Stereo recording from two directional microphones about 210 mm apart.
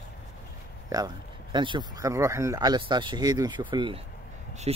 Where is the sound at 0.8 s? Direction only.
20° right (ahead or behind).